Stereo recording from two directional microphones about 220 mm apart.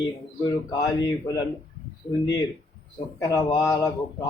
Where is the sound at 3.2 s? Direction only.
15° left (ahead or behind).